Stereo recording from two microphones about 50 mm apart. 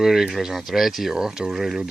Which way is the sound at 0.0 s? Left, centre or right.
Centre.